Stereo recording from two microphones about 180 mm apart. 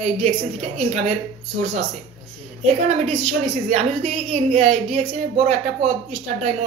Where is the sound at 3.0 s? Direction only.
40° right (ahead or behind).